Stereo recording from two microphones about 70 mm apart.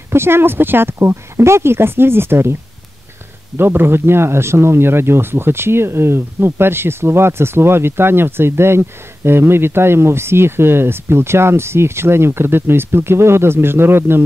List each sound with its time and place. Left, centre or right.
0.1 s speech: right
3.5 s speech: right